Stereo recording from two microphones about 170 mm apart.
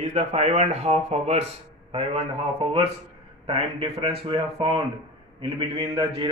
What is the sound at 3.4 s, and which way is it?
A man's voice, 35° right (ahead or behind).